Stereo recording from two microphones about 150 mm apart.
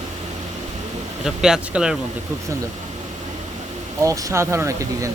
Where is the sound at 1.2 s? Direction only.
5° right (ahead or behind).